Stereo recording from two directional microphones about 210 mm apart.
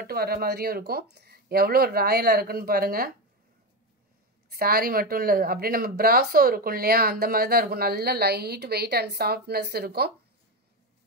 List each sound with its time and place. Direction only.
0.0 s speech: 45° right (ahead or behind)
4.5 s speech: 45° right (ahead or behind)